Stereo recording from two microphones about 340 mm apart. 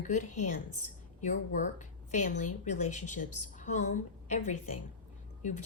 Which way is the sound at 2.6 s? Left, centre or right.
Left.